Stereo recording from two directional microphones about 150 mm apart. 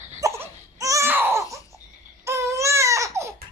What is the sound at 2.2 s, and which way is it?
Baby cry, 20° right (ahead or behind).